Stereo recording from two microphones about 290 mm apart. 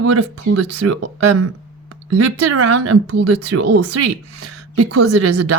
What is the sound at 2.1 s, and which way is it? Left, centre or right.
A woman's voice, right.